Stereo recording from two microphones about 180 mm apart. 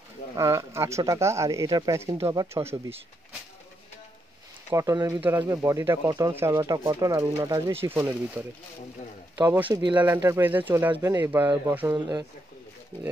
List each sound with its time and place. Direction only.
0.4 s speech: 15° right (ahead or behind)
4.6 s speech: 20° right (ahead or behind)
9.5 s speech: 10° right (ahead or behind)